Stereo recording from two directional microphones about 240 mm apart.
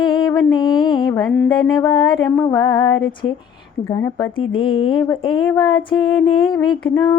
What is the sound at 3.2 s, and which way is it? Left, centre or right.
Mantra, left.